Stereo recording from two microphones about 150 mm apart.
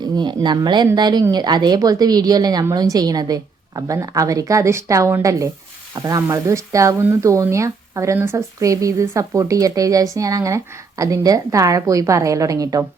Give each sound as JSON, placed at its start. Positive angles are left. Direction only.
{"t": 0.2, "sound": "speech", "side_deg": -30}